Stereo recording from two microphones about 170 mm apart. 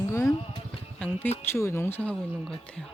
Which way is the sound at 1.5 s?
15° left (ahead or behind).